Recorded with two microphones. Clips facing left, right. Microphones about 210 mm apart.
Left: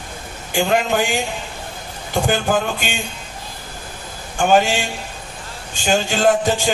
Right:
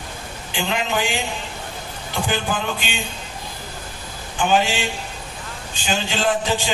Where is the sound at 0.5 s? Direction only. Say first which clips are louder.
Left 6 dB; 50° left (ahead or behind).